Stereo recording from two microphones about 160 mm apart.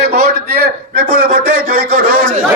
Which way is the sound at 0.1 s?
75° right (ahead or behind).